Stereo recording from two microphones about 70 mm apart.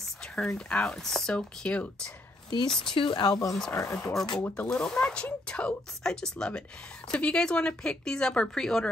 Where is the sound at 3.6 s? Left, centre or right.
Left.